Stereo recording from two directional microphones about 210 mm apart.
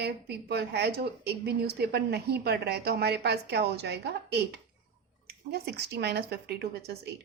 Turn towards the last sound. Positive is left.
turn(degrees=-50)  # may be behind; listen again after turning